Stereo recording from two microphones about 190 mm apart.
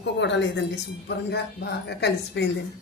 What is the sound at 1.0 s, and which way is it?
A woman's voice, 60° left (ahead or behind).